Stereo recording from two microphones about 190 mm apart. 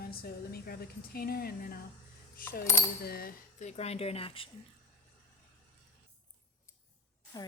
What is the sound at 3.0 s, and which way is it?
Speech, 50° left (ahead or behind).